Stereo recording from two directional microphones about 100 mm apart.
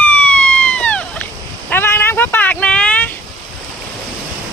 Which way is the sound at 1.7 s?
20° left (ahead or behind).